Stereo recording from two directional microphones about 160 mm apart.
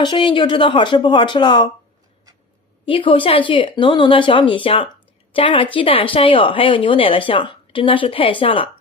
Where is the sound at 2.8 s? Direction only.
35° left (ahead or behind).